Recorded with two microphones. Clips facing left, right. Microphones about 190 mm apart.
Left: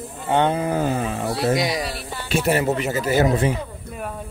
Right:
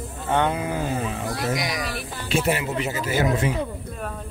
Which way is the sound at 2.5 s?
45° left (ahead or behind).